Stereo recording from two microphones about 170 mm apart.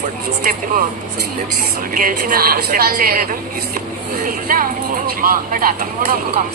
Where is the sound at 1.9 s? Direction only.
55° right (ahead or behind).